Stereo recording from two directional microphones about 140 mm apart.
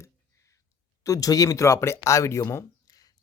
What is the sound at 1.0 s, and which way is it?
A man's voice, 25° left (ahead or behind).